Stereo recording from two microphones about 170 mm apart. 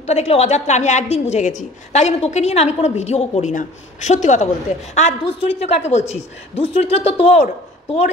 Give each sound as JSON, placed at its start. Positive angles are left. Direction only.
{"t": 0.0, "sound": "a woman's voice", "side_deg": 40}